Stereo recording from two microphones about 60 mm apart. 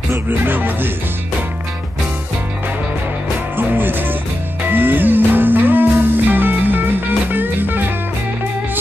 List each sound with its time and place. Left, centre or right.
0.1 s music: right
3.5 s music: right